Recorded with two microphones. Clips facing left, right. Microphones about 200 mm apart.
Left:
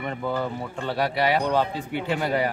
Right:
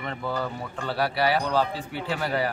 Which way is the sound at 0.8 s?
20° left (ahead or behind).